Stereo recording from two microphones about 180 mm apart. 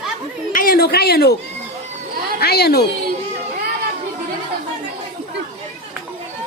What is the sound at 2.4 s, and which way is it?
Speech, 65° left (ahead or behind).